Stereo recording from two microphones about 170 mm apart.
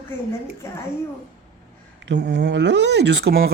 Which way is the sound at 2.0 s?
90° right.